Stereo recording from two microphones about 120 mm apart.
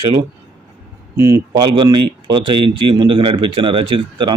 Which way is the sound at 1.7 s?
40° right (ahead or behind).